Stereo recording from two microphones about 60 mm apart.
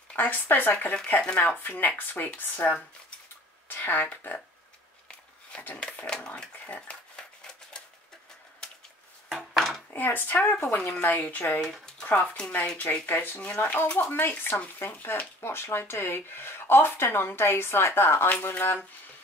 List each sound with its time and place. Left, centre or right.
0.1 s speech: left
5.8 s speech: centre
6.1 s a sound: centre
9.9 s speech: left
13.4 s speech: left